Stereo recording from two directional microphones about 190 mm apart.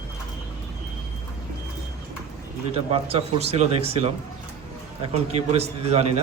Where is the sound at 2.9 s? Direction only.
30° right (ahead or behind).